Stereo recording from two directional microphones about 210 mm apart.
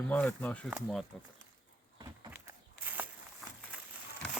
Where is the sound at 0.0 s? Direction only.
5° left (ahead or behind).